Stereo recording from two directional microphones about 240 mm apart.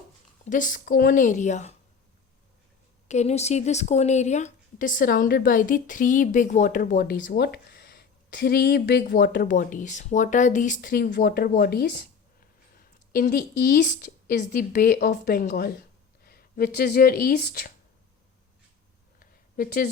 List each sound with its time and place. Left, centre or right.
0.4 s speech: left
3.1 s speech: left
13.1 s speech: left
19.2 s a sound: left